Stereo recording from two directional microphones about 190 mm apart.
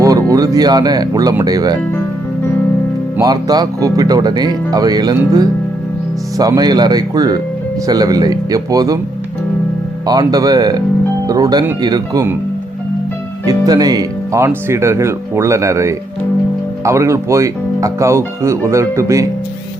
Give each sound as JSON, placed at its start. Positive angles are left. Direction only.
{"t": 0.0, "sound": "speech", "side_deg": -20}
{"t": 3.2, "sound": "speech", "side_deg": -20}
{"t": 10.1, "sound": "speech", "side_deg": -20}
{"t": 13.4, "sound": "speech", "side_deg": -20}